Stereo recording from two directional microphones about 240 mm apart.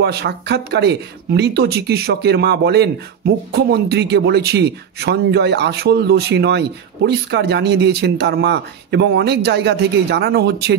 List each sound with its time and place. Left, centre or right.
0.0 s a man's voice: right